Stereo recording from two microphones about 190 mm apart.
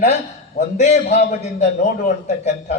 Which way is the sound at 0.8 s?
35° left (ahead or behind).